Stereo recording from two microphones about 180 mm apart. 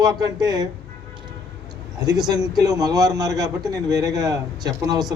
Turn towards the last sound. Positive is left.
turn(degrees=-20)  # may be behind; listen again after turning